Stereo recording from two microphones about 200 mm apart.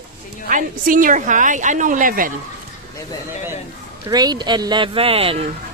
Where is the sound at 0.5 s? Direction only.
40° right (ahead or behind).